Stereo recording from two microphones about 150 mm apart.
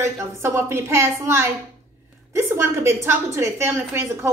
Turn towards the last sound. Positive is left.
turn(degrees=-15)  # may be behind; listen again after turning